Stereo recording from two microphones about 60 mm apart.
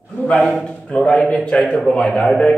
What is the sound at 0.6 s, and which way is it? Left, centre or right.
A man's voice, left.